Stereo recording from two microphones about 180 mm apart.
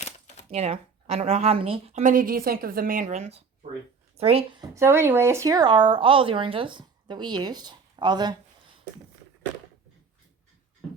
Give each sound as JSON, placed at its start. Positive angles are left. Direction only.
{"t": 0.5, "sound": "speech", "side_deg": -35}
{"t": 4.7, "sound": "speech", "side_deg": -15}